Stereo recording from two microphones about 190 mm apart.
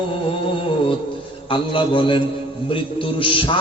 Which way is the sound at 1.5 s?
25° left (ahead or behind).